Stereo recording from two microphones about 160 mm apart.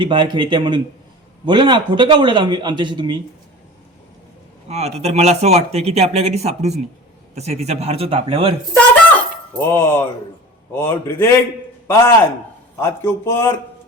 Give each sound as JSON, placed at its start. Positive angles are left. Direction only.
{"t": 0.0, "sound": "speech", "side_deg": -30}
{"t": 4.7, "sound": "speech", "side_deg": -40}
{"t": 9.5, "sound": "a man's voice", "side_deg": 15}